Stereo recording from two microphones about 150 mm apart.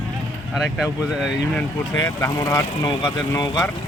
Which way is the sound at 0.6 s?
5° right (ahead or behind).